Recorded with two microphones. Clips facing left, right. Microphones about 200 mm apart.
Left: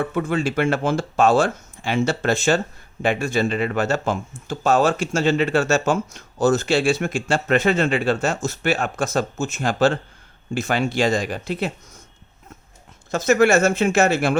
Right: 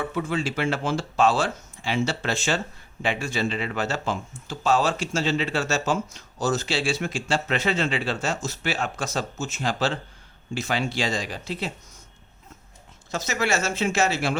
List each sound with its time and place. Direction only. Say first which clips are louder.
0.0 s speech: left 5 dB; 55° left (ahead or behind)
13.1 s speech: left 10 dB; 55° left (ahead or behind)